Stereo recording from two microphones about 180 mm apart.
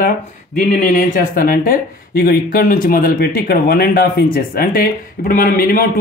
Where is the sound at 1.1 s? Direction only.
50° left (ahead or behind).